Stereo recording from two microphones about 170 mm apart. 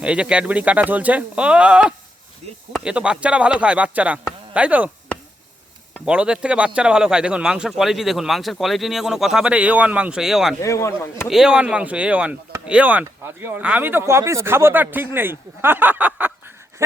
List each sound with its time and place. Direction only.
0.0 s speech: 5° right (ahead or behind)
6.1 s a man's voice: 5° right (ahead or behind)
10.6 s speech: 15° left (ahead or behind)
11.3 s speech: 5° right (ahead or behind)